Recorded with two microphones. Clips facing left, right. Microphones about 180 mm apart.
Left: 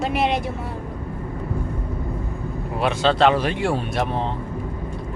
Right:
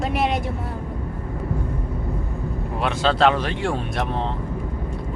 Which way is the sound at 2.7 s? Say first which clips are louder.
Left 2 dB; centre (ahead or behind).